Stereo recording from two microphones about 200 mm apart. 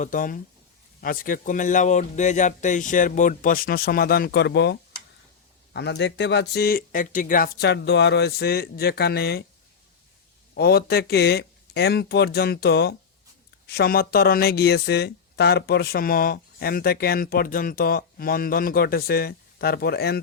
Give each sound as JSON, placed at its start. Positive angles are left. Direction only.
{"t": 0.0, "sound": "a man's voice", "side_deg": 40}
{"t": 10.5, "sound": "speech", "side_deg": 55}